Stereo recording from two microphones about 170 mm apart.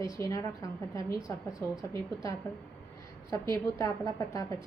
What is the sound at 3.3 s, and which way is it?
Speech, 20° left (ahead or behind).